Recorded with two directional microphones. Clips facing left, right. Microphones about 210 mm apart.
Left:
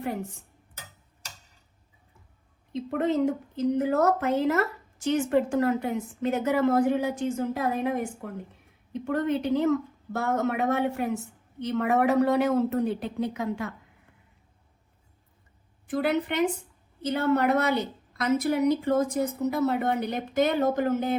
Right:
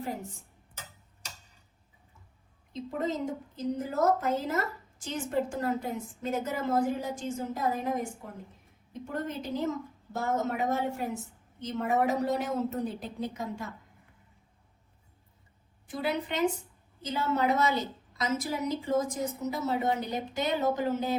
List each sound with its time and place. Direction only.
2.7 s a woman's voice: 65° left (ahead or behind)
15.9 s a woman's voice: 55° left (ahead or behind)